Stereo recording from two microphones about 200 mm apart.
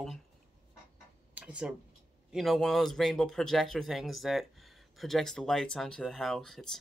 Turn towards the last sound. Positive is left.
turn(degrees=0)  # may be behind; listen again after turning